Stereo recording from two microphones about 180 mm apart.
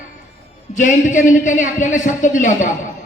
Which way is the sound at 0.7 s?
45° left (ahead or behind).